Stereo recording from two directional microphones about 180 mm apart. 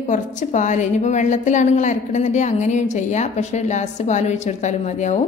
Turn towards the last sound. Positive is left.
turn(degrees=40)  # may be behind; listen again after turning